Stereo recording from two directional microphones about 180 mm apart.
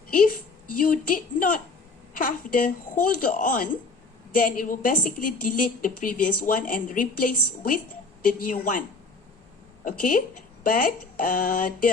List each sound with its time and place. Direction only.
0.8 s a woman's voice: 50° left (ahead or behind)
9.8 s a woman's voice: 50° left (ahead or behind)